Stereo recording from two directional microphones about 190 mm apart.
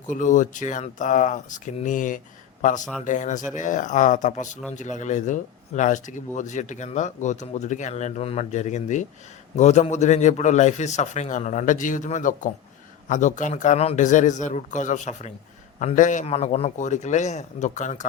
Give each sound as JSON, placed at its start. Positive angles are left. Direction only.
{"t": 0.1, "sound": "speech", "side_deg": 40}